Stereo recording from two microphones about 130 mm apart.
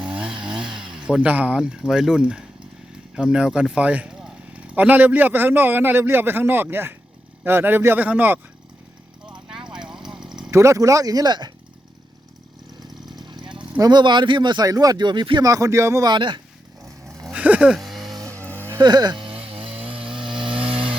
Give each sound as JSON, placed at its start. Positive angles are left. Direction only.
{"t": 0.0, "sound": "chainsaw", "side_deg": -5}
{"t": 3.2, "sound": "speech", "side_deg": -5}
{"t": 9.5, "sound": "a sound", "side_deg": -5}
{"t": 10.5, "sound": "speech", "side_deg": -25}
{"t": 13.1, "sound": "a sound", "side_deg": -35}
{"t": 13.7, "sound": "speech", "side_deg": -30}
{"t": 16.1, "sound": "speech", "side_deg": -35}
{"t": 17.3, "sound": "a sound", "side_deg": -10}
{"t": 18.3, "sound": "music", "side_deg": 10}
{"t": 18.8, "sound": "speech", "side_deg": -30}
{"t": 19.5, "sound": "chainsaw", "side_deg": -45}
{"t": 20.7, "sound": "vehicle", "side_deg": -45}